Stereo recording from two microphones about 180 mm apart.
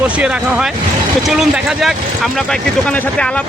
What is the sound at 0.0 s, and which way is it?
Speech, 5° right (ahead or behind).